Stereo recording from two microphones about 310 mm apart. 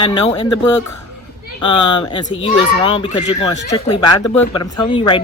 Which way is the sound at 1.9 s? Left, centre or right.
Centre.